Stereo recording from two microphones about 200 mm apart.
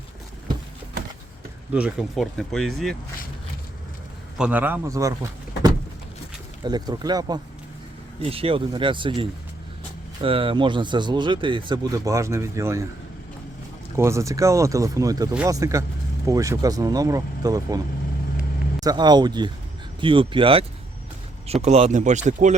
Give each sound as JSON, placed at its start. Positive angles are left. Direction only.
{"t": 1.7, "sound": "speech", "side_deg": -5}
{"t": 4.4, "sound": "speech", "side_deg": -5}
{"t": 13.9, "sound": "speech", "side_deg": -15}
{"t": 18.8, "sound": "speech", "side_deg": -20}